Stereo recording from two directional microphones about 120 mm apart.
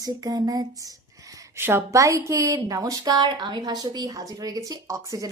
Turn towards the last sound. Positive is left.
turn(degrees=-25)  # may be behind; listen again after turning